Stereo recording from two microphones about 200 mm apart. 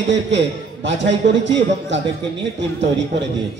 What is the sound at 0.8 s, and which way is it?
A man's voice, 65° right (ahead or behind).